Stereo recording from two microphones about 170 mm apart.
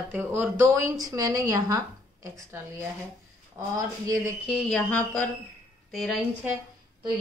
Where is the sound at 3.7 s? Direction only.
20° right (ahead or behind).